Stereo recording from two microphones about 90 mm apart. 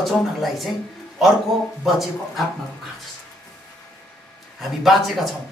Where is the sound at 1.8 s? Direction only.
Centre (ahead or behind).